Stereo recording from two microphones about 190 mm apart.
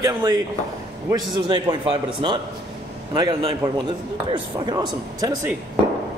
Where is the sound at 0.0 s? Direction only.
20° right (ahead or behind).